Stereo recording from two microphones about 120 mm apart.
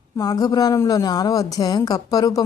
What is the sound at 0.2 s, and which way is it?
A woman's voice, 30° left (ahead or behind).